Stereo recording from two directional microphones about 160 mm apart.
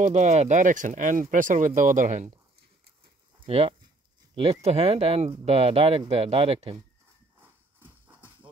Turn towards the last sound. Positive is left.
turn(degrees=-40)  # may be behind; listen again after turning